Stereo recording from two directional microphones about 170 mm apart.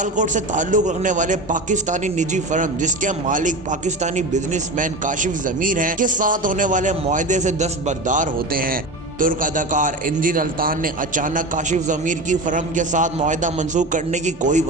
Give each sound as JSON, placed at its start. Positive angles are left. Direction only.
{"t": 0.0, "sound": "a man's voice", "side_deg": -45}